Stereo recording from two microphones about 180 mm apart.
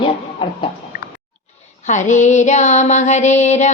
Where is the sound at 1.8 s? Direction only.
40° left (ahead or behind).